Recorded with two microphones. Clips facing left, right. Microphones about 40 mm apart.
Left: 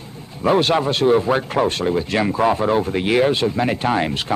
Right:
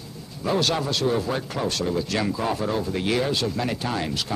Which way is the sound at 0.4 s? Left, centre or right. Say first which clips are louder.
Left 7 dB; left.